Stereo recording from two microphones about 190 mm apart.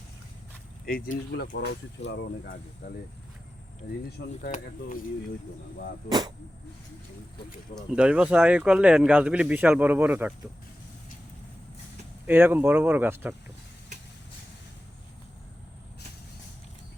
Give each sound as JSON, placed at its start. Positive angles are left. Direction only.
{"t": 1.0, "sound": "speech", "side_deg": 90}
{"t": 1.4, "sound": "speech", "side_deg": 60}
{"t": 4.4, "sound": "speech", "side_deg": 45}
{"t": 6.1, "sound": "speech", "side_deg": -20}
{"t": 7.8, "sound": "speech", "side_deg": -5}
{"t": 12.2, "sound": "speech", "side_deg": -10}